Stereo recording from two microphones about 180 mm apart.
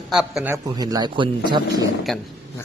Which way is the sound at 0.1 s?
5° right (ahead or behind).